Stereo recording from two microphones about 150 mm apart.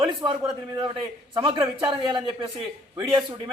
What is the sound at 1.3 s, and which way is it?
Speech, 35° right (ahead or behind).